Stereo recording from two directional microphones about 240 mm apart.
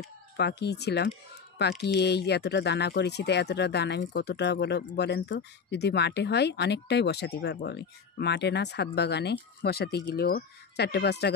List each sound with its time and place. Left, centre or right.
0.0 s speech: left